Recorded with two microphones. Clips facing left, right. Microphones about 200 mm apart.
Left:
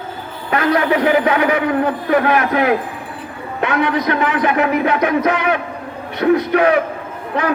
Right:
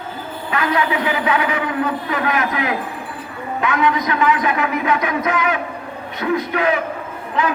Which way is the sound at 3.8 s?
60° left (ahead or behind).